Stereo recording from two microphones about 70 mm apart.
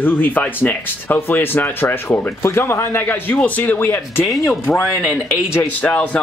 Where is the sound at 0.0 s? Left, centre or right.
Left.